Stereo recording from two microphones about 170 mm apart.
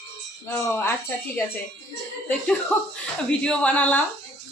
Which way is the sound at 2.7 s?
5° left (ahead or behind).